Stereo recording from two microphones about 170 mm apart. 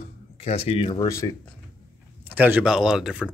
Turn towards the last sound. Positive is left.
turn(degrees=-5)  # may be behind; listen again after turning